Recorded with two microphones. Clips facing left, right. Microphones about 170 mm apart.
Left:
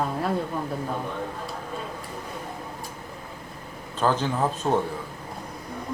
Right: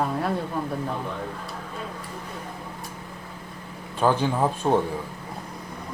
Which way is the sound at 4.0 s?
15° right (ahead or behind).